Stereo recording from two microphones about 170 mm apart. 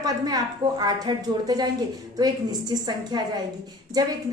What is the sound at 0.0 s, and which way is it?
A woman's voice, 25° right (ahead or behind).